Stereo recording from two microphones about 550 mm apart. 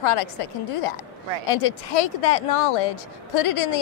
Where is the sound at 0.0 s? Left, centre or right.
Left.